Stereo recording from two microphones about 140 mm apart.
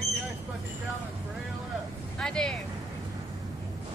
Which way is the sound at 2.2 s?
5° left (ahead or behind).